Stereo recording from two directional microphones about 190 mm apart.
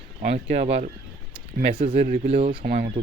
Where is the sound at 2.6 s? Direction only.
50° right (ahead or behind).